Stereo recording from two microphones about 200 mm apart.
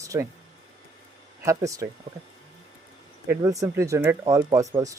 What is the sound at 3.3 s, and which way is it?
Speech, 15° right (ahead or behind).